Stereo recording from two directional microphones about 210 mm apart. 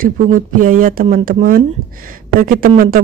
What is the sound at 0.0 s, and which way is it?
Speech, 40° right (ahead or behind).